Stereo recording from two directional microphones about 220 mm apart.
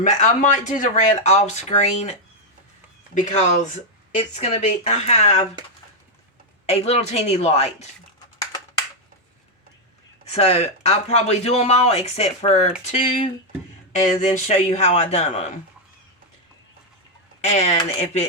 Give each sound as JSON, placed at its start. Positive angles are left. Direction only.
{"t": 0.0, "sound": "speech", "side_deg": 35}
{"t": 3.2, "sound": "speech", "side_deg": 30}
{"t": 6.7, "sound": "speech", "side_deg": 30}
{"t": 10.2, "sound": "speech", "side_deg": 30}
{"t": 13.9, "sound": "speech", "side_deg": 30}
{"t": 17.4, "sound": "speech", "side_deg": 30}